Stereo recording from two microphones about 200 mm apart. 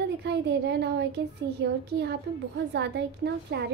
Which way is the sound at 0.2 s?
55° right (ahead or behind).